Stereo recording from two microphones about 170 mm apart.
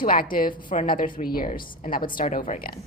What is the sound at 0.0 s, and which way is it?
A woman's voice, 55° left (ahead or behind).